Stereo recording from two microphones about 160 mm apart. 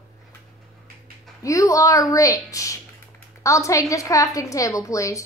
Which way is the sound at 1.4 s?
20° left (ahead or behind).